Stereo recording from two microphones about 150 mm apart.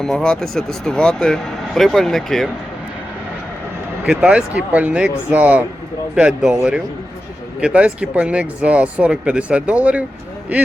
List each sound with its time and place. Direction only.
0.0 s speech: 5° left (ahead or behind)
4.0 s speech: 5° right (ahead or behind)
7.6 s speech: 5° right (ahead or behind)